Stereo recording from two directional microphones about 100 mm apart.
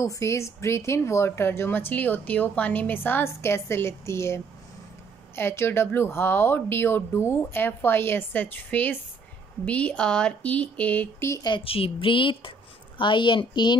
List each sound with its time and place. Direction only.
0.0 s speech: 30° left (ahead or behind); by 11.2 s 15° left (ahead or behind)
11.4 s a woman's voice: 60° left (ahead or behind)